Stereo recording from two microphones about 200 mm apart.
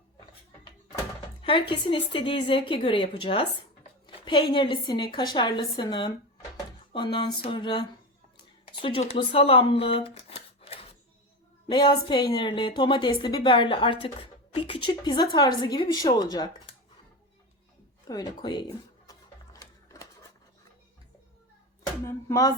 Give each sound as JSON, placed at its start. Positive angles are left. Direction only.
{"t": 1.4, "sound": "a woman's voice", "side_deg": 25}
{"t": 18.1, "sound": "a woman's voice", "side_deg": 20}
{"t": 19.5, "sound": "sewing machine", "side_deg": 15}
{"t": 22.0, "sound": "speech", "side_deg": 15}